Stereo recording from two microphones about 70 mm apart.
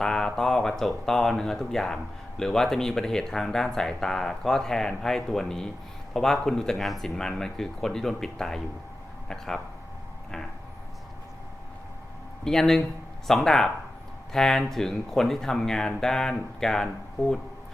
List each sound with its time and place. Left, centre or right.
0.0 s a man's voice: centre
12.5 s a man's voice: centre